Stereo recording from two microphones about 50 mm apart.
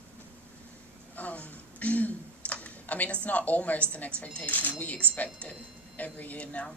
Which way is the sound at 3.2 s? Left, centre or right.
Left.